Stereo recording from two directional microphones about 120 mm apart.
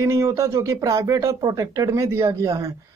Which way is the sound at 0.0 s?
25° right (ahead or behind).